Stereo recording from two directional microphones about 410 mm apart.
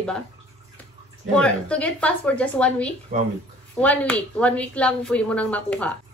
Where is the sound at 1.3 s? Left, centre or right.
Centre.